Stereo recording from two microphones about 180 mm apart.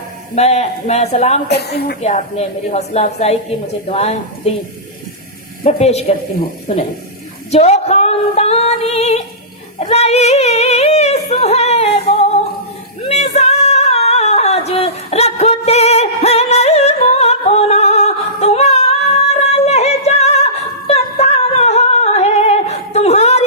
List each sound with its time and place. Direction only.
0.3 s speech: 40° left (ahead or behind)
1.5 s a woman's voice: 65° left (ahead or behind)
2.0 s speech: 40° left (ahead or behind)
5.6 s speech: 35° left (ahead or behind)
7.5 s female singing: 35° left (ahead or behind)
11.3 s music: 35° left (ahead or behind)
13.1 s singing: 35° left (ahead or behind)